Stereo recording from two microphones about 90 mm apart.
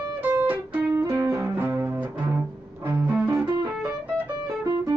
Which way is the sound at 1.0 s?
35° right (ahead or behind).